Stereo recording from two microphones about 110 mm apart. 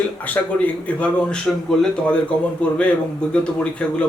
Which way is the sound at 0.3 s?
15° left (ahead or behind).